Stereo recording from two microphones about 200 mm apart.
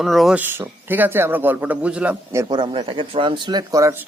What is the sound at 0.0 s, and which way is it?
Speech, centre (ahead or behind).